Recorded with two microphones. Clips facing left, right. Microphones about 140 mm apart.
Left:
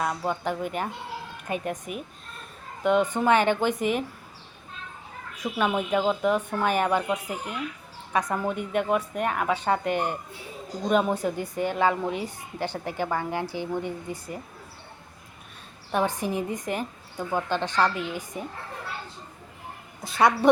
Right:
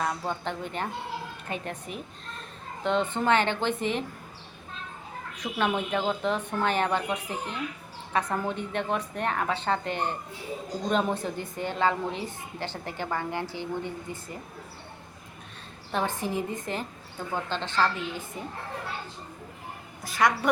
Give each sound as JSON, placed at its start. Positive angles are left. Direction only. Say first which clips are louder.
{"t": 0.0, "sound": "a woman's voice", "louder": "left 3 dB", "side_deg": 10}
{"t": 5.4, "sound": "a woman's voice", "louder": "left 2 dB", "side_deg": 10}
{"t": 15.9, "sound": "a woman's voice", "louder": "left 3 dB", "side_deg": 15}
{"t": 20.1, "sound": "a woman's voice", "louder": "left 4 dB", "side_deg": 25}